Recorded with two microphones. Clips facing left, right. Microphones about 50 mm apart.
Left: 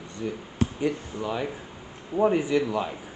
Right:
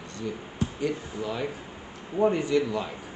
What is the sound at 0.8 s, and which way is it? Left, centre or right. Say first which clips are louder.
A man's voice: left 2 dB; centre.